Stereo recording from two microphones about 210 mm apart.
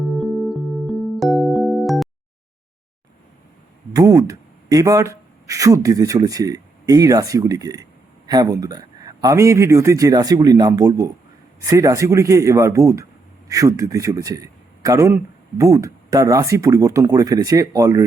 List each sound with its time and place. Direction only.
0.2 s music: centre (ahead or behind)
3.9 s a man's voice: 15° right (ahead or behind)